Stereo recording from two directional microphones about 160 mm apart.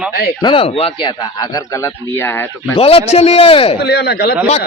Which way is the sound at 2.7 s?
35° left (ahead or behind).